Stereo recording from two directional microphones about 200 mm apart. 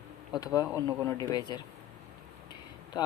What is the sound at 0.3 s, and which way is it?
Speech, 20° left (ahead or behind).